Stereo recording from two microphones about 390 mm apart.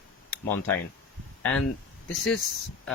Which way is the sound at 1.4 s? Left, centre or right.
Centre.